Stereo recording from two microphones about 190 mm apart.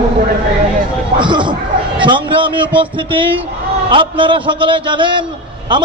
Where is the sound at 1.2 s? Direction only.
25° right (ahead or behind).